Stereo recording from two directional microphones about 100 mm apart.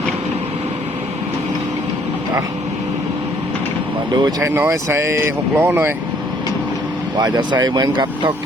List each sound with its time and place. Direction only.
4.1 s speech: 50° right (ahead or behind)
4.4 s speech: 25° right (ahead or behind)
7.2 s speech: 45° right (ahead or behind)